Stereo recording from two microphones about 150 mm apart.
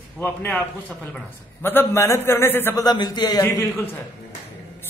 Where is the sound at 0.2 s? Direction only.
10° left (ahead or behind).